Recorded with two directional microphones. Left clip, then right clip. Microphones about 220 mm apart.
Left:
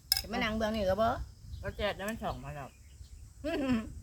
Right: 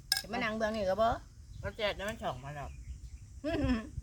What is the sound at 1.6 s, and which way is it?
Speech, 20° right (ahead or behind).